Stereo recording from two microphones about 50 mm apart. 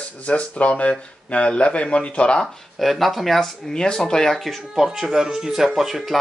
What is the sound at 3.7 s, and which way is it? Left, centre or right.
Speech, centre.